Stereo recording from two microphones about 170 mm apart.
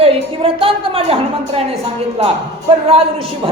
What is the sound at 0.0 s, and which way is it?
A woman's voice, 35° right (ahead or behind).